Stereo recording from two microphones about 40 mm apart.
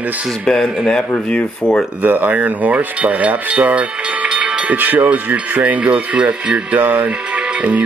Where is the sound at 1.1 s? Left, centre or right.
Left.